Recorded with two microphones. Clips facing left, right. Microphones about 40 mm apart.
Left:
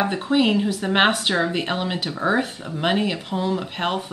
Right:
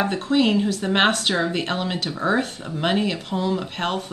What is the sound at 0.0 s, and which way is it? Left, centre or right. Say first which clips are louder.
Speech: even; centre.